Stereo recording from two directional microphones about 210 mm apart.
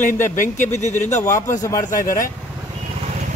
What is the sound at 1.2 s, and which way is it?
Speech, 15° left (ahead or behind).